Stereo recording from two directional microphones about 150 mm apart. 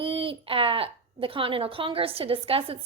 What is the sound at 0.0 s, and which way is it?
A woman's voice, 35° right (ahead or behind).